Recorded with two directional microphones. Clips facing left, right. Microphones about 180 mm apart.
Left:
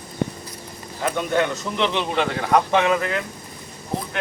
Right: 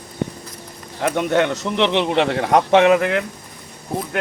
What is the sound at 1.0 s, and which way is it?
A man's voice, 70° right (ahead or behind).